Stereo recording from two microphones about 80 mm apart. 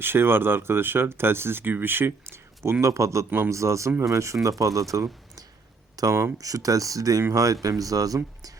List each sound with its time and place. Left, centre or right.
0.0 s speech: right
2.8 s speech: right
3.2 s speech: right
3.5 s speech: right